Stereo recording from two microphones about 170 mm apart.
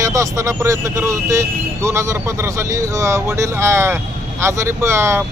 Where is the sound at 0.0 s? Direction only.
20° right (ahead or behind).